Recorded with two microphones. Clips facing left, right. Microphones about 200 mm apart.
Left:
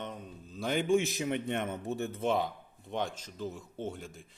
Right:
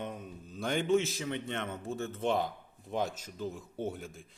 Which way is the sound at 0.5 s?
Centre (ahead or behind).